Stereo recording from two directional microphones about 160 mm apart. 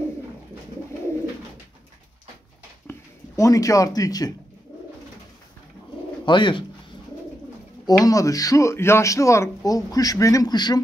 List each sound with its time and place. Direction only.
2.9 s speech: 20° left (ahead or behind)
6.2 s speech: 30° left (ahead or behind)
7.8 s speech: 20° left (ahead or behind)